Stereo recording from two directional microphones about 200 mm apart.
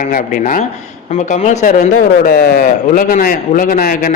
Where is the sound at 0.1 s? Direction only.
45° left (ahead or behind).